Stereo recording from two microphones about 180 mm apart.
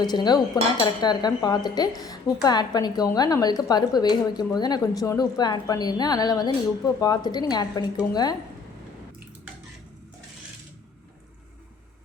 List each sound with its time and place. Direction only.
0.0 s a woman's voice: 25° left (ahead or behind)